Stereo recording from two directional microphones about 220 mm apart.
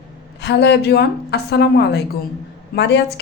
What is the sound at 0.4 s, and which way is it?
A woman's voice, 50° left (ahead or behind).